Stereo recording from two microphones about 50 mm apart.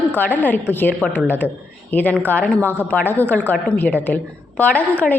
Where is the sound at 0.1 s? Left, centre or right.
Left.